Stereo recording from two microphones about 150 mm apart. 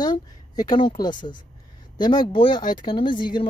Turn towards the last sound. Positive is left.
turn(degrees=30)  # may be behind; listen again after turning